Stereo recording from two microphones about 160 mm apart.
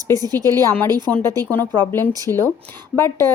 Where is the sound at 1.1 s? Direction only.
5° left (ahead or behind).